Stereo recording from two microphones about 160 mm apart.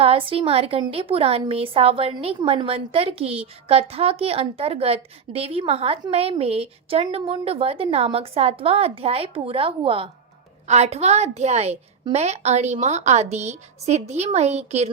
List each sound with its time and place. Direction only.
0.0 s a woman's voice: 35° right (ahead or behind)